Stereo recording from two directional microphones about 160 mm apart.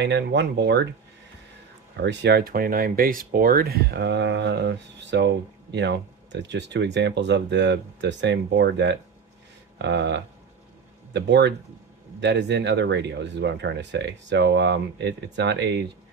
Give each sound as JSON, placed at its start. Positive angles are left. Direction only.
{"t": 0.0, "sound": "speech", "side_deg": -90}
{"t": 2.0, "sound": "speech", "side_deg": -90}